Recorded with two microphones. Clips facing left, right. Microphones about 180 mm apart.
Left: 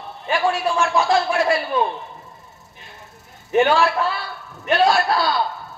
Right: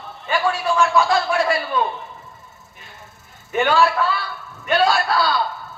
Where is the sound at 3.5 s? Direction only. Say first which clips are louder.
Left 1 dB; 25° left (ahead or behind).